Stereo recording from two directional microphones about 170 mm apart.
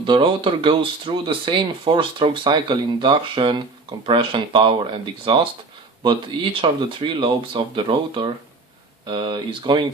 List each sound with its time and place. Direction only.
0.0 s speech: 30° right (ahead or behind)